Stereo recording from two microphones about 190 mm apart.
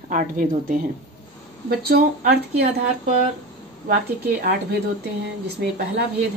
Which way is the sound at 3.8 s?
50° right (ahead or behind).